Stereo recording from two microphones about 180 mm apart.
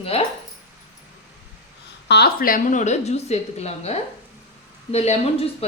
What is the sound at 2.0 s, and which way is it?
A woman's voice, 65° left (ahead or behind).